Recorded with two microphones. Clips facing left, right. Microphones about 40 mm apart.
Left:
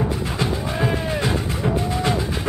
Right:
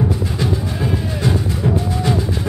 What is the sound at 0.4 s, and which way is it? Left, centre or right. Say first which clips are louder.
Music: right 1 dB; left.